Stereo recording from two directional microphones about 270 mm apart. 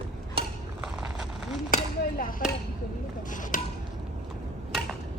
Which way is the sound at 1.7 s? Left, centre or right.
Left.